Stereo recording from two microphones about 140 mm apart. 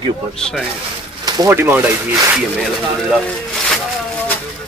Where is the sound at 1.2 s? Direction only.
25° right (ahead or behind).